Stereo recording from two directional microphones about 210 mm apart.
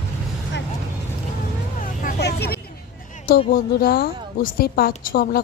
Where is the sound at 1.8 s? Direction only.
40° left (ahead or behind).